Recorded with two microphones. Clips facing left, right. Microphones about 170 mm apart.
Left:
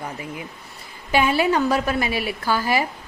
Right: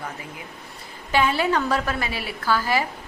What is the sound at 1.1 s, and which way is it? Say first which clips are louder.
A woman's voice: left 2 dB; 10° left (ahead or behind).